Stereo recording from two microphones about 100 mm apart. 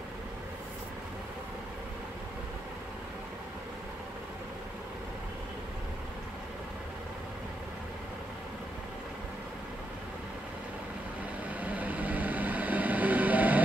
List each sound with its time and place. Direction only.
11.6 s vehicle: 15° right (ahead or behind)